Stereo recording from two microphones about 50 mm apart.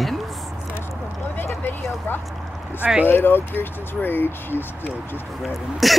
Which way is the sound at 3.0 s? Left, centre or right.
Left.